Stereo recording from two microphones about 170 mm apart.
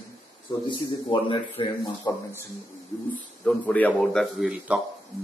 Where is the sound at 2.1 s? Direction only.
20° left (ahead or behind).